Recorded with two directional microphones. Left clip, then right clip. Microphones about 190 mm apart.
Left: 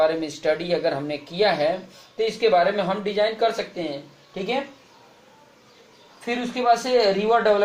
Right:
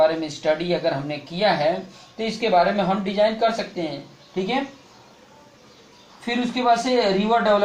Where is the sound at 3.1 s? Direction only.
55° left (ahead or behind).